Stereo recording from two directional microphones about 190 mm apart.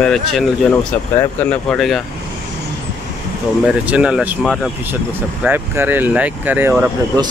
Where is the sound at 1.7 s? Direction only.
Centre (ahead or behind).